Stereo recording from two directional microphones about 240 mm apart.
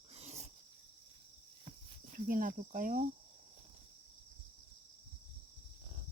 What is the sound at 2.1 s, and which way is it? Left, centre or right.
Cricket, right.